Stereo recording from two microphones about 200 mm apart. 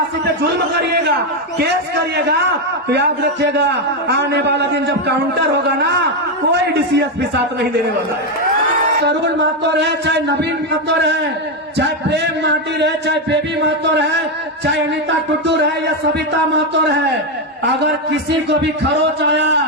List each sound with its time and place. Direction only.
2.9 s a man's voice: 55° right (ahead or behind)
9.0 s a man's voice: 60° right (ahead or behind)
16.7 s a man's voice: 60° right (ahead or behind)
19.3 s a man's voice: 60° right (ahead or behind)